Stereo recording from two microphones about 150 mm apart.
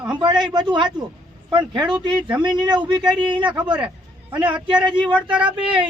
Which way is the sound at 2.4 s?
30° right (ahead or behind).